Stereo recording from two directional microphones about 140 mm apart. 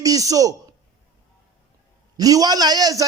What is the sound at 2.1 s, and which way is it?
Speech, 25° right (ahead or behind).